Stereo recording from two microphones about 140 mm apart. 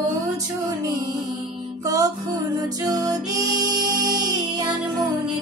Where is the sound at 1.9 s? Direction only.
25° right (ahead or behind).